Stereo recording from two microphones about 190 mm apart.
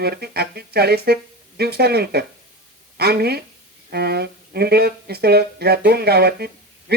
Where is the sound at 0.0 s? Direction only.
55° right (ahead or behind).